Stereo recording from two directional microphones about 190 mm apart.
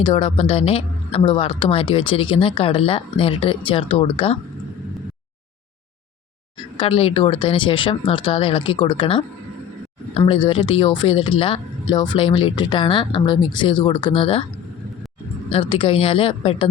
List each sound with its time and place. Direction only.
0.0 s speech: 25° left (ahead or behind)
6.7 s speech: 30° left (ahead or behind)
15.5 s speech: 30° left (ahead or behind)